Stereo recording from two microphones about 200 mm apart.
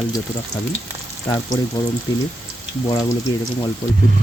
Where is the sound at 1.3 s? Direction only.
20° left (ahead or behind).